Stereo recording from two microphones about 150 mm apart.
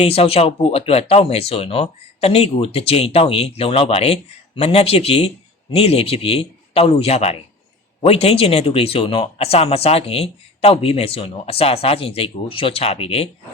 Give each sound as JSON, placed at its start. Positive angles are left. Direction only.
{"t": 0.0, "sound": "speech", "side_deg": 40}